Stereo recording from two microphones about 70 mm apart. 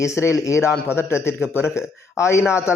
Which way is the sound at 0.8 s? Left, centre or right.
Left.